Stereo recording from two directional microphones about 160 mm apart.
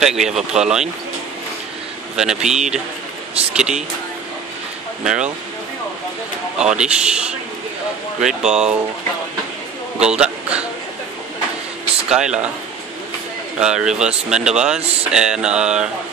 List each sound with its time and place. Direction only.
0.0 s speech: 5° right (ahead or behind)
2.1 s speech: 5° right (ahead or behind)
5.0 s speech: 5° right (ahead or behind)
6.6 s speech: 5° right (ahead or behind)
9.9 s a sound: 5° right (ahead or behind)
12.1 s speech: 5° right (ahead or behind)
13.6 s speech: 5° right (ahead or behind)